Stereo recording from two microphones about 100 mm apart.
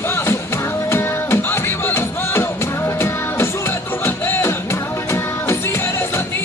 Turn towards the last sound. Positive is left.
turn(degrees=25)  # may be behind; listen again after turning